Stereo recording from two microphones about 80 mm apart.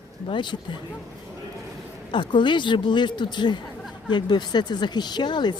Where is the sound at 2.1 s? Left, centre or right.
Left.